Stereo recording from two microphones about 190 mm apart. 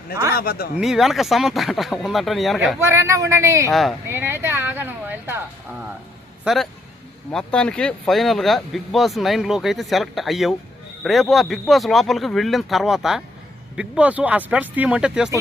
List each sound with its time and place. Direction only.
0.3 s speech: 55° left (ahead or behind)
0.8 s speech: centre (ahead or behind)
2.7 s speech: 15° right (ahead or behind)
3.7 s speech: centre (ahead or behind)
4.1 s speech: 10° right (ahead or behind)
6.4 s speech: centre (ahead or behind)